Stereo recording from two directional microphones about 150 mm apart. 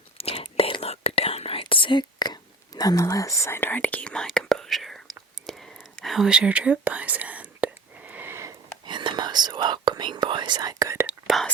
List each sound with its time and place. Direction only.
0.2 s whispering: 40° left (ahead or behind); by 8.5 s 15° right (ahead or behind)
8.9 s whispering: 30° right (ahead or behind)
11.3 s speech: centre (ahead or behind)